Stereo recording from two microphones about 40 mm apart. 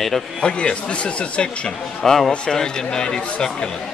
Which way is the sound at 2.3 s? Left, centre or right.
Centre.